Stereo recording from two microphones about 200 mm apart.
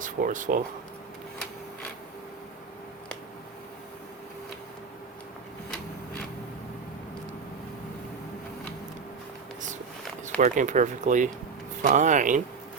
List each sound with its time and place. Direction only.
0.0 s speech: 40° right (ahead or behind)
10.2 s speech: 40° right (ahead or behind)